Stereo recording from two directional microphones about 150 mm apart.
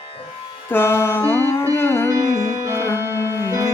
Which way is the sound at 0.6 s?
15° left (ahead or behind).